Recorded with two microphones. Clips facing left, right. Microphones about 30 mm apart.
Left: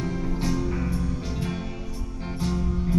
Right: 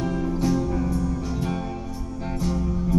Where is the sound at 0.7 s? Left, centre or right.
Left.